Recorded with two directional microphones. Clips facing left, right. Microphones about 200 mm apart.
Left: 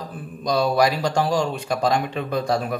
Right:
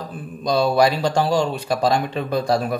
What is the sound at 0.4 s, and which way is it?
Speech, 25° right (ahead or behind).